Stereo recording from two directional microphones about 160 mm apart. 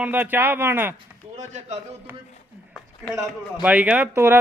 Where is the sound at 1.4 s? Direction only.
45° right (ahead or behind).